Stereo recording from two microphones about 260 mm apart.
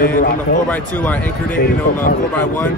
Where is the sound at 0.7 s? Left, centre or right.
Centre.